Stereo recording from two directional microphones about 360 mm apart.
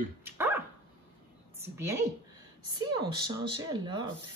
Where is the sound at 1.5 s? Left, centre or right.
Centre.